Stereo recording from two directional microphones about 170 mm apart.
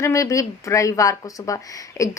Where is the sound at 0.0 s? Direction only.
20° left (ahead or behind).